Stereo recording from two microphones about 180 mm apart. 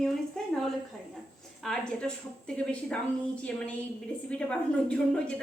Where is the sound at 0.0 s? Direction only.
Centre (ahead or behind).